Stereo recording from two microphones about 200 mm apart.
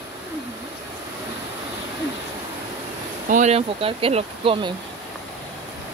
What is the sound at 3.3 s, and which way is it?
Speech, 35° right (ahead or behind).